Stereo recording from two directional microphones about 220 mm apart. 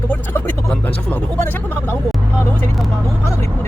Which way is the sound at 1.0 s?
10° left (ahead or behind).